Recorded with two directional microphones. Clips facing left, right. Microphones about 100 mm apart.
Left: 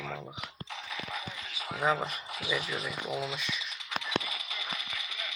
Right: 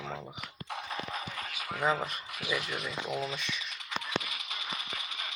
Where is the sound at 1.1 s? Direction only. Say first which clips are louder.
Right 2 dB; 45° right (ahead or behind).